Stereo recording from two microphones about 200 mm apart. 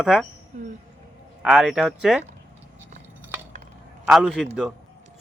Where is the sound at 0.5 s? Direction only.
35° right (ahead or behind).